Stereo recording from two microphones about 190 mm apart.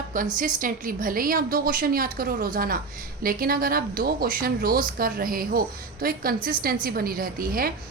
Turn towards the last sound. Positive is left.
turn(degrees=-50)  # may be behind; listen again after turning